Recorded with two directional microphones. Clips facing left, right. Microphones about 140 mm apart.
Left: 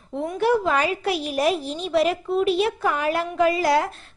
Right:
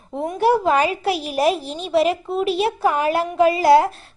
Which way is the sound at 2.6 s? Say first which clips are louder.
Right 4 dB; 35° right (ahead or behind).